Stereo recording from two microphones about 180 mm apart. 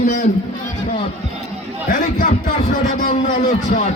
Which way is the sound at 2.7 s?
50° left (ahead or behind).